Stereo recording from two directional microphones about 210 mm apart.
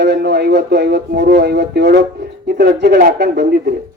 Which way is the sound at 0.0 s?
50° right (ahead or behind).